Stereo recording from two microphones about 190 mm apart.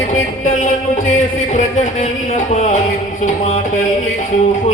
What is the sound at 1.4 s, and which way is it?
Music, 40° left (ahead or behind).